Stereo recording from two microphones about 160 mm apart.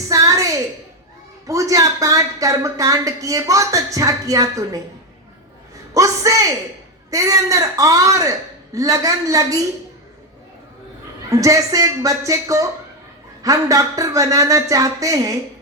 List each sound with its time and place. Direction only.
0.1 s a sound: 20° right (ahead or behind)
1.5 s speech: 20° right (ahead or behind)
5.9 s speech: 20° right (ahead or behind)
11.3 s speech: 20° right (ahead or behind)